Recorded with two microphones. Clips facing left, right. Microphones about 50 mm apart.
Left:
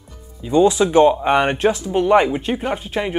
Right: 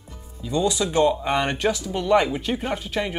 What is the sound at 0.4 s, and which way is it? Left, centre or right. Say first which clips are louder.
Speech: left 8 dB; left.